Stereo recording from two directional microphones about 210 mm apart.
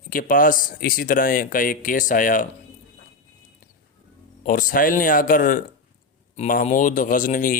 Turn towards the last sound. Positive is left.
turn(degrees=40)  # may be behind; listen again after turning